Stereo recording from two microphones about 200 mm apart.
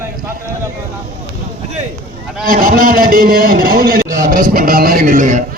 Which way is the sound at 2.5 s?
45° right (ahead or behind).